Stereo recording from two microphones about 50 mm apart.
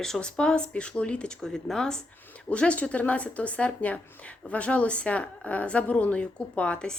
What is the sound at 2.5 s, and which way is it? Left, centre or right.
A woman's voice, left.